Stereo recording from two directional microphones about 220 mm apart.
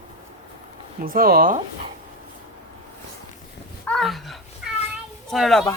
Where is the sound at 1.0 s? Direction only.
40° right (ahead or behind).